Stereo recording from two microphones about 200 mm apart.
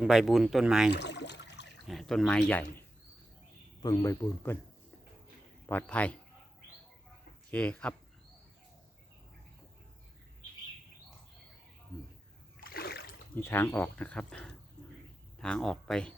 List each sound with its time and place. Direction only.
0.0 s speech: centre (ahead or behind)
0.9 s a sound: 60° left (ahead or behind)
1.9 s speech: centre (ahead or behind)
3.8 s speech: 15° left (ahead or behind)
5.6 s speech: 10° left (ahead or behind)
7.5 s speech: 5° left (ahead or behind)
12.5 s splash: 50° left (ahead or behind)
13.3 s speech: 10° left (ahead or behind)